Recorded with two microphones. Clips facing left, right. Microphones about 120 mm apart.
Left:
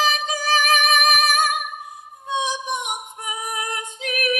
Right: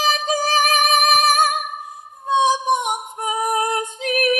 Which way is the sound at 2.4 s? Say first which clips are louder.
Right 9 dB; 35° right (ahead or behind).